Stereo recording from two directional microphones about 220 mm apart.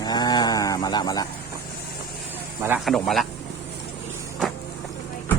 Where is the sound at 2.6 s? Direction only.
10° right (ahead or behind).